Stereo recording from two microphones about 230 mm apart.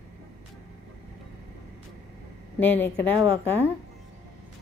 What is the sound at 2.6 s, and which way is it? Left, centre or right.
Speech, centre.